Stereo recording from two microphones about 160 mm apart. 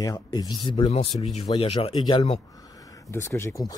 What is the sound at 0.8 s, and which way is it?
Speech, 40° left (ahead or behind).